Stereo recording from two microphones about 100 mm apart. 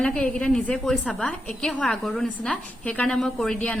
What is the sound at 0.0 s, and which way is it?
A woman's voice, 10° left (ahead or behind).